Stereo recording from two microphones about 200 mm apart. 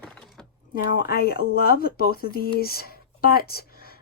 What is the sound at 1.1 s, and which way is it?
Speech, 50° left (ahead or behind).